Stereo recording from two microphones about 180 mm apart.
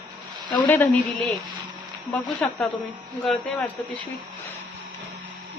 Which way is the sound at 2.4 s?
5° left (ahead or behind).